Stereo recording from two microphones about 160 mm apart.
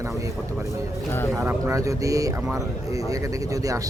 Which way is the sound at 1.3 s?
15° right (ahead or behind).